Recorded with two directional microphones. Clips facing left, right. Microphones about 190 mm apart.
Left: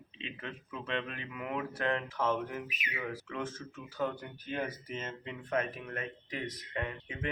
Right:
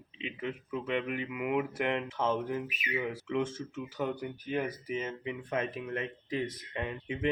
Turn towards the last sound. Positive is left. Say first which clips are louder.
# right 3 dB
turn(degrees=-20)  # may be behind; listen again after turning